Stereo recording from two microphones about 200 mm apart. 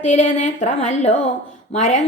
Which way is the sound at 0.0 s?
35° left (ahead or behind).